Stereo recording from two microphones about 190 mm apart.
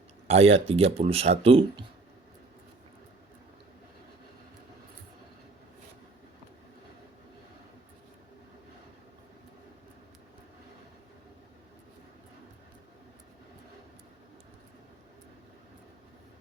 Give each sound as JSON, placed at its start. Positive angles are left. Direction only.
{"t": 0.3, "sound": "speech", "side_deg": -30}